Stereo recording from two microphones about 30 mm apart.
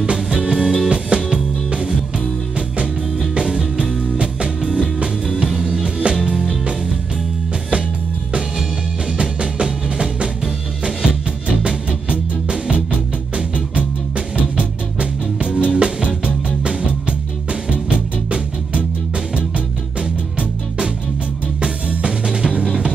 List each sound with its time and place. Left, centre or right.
0.5 s music: centre
0.8 s music: right
4.6 s music: centre
9.2 s music: right
13.7 s music: right
19.3 s music: right